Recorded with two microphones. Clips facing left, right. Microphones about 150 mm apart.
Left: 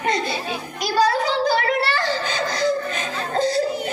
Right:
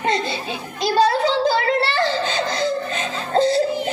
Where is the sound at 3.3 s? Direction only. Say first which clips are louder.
Right 4 dB; 25° right (ahead or behind).